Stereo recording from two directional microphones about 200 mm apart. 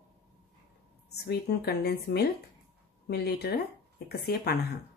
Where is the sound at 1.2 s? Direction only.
55° left (ahead or behind).